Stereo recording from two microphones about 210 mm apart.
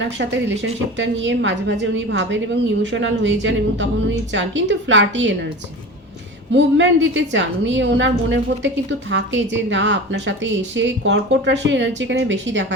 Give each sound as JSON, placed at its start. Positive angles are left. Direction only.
{"t": 0.0, "sound": "a woman's voice", "side_deg": -60}
{"t": 6.5, "sound": "a woman's voice", "side_deg": -60}